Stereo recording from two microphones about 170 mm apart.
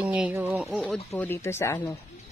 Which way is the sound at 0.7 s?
Centre (ahead or behind).